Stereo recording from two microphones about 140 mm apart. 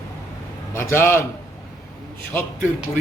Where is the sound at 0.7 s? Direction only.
15° left (ahead or behind).